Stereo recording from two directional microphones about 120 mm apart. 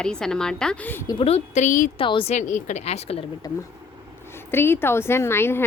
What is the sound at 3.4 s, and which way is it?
Speech, 30° left (ahead or behind).